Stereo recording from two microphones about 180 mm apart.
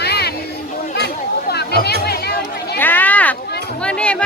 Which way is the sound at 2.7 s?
10° left (ahead or behind).